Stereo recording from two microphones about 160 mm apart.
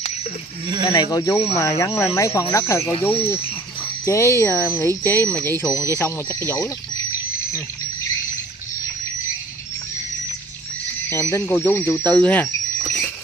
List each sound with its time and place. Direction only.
0.9 s speech: 20° left (ahead or behind)
2.9 s speech: 35° left (ahead or behind)
4.0 s speech: 20° left (ahead or behind)
11.1 s speech: 15° left (ahead or behind)
12.2 s cricket: 10° left (ahead or behind)